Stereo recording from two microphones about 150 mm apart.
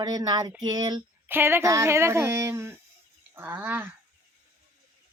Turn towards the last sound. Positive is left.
turn(degrees=-15)  # may be behind; listen again after turning